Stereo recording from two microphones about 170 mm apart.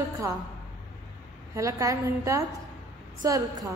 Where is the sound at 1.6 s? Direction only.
20° right (ahead or behind).